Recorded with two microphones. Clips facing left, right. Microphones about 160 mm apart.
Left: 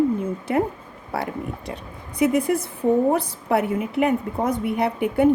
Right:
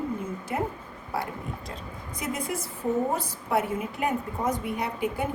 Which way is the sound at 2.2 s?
65° left (ahead or behind).